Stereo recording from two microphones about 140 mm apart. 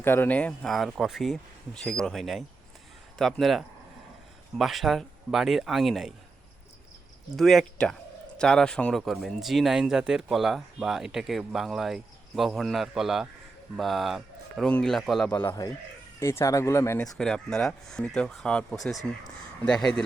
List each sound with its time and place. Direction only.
0.0 s speech: 15° left (ahead or behind); by 6.1 s centre (ahead or behind)
7.3 s speech: centre (ahead or behind)
15.3 s speech: 15° left (ahead or behind)
17.2 s speech: 5° left (ahead or behind)